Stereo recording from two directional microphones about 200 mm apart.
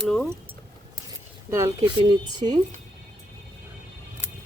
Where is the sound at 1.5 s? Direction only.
15° right (ahead or behind).